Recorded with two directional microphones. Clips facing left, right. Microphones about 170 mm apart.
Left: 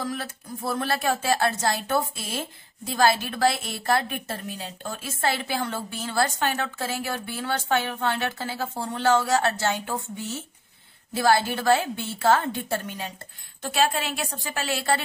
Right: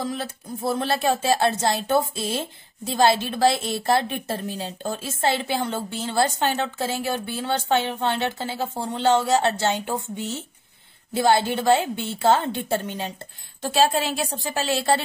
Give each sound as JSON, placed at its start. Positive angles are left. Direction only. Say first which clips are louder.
{"t": 0.0, "sound": "speech", "louder": "right 2 dB", "side_deg": -25}